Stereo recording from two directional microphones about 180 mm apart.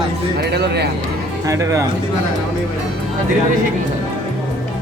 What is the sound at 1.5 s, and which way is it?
Speech, 15° right (ahead or behind).